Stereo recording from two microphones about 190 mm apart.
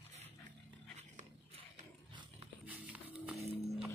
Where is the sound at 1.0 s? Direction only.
35° right (ahead or behind).